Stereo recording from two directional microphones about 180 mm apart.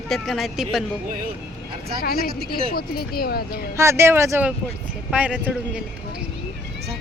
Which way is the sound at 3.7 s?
15° right (ahead or behind).